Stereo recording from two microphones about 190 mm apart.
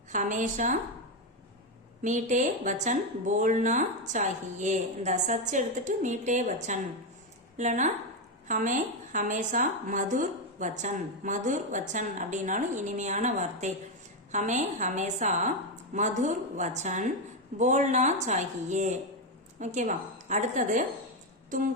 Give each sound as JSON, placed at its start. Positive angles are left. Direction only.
{"t": 0.1, "sound": "a woman's voice", "side_deg": -40}
{"t": 2.0, "sound": "a woman's voice", "side_deg": -40}